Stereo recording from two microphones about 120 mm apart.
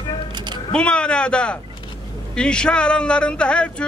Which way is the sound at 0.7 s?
10° left (ahead or behind).